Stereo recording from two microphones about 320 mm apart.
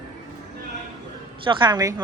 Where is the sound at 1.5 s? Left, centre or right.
Centre.